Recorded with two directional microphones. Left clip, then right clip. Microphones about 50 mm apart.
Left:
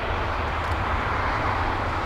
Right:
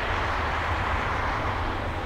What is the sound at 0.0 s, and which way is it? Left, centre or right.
Vehicle, centre.